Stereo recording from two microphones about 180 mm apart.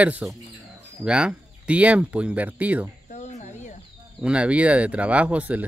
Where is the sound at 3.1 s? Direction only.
40° left (ahead or behind).